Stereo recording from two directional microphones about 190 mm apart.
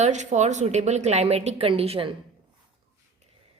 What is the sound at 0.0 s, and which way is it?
A woman's voice, 40° right (ahead or behind).